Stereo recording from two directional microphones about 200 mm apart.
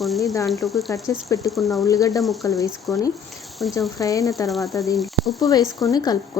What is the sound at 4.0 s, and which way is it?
Speech, 15° left (ahead or behind).